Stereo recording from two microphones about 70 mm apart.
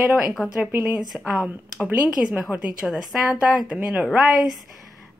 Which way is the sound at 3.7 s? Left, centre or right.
Centre.